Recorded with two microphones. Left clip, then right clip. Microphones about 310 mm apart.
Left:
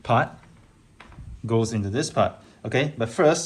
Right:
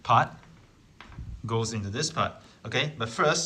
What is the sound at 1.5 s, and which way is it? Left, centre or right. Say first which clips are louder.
A man's voice: left 6 dB; centre.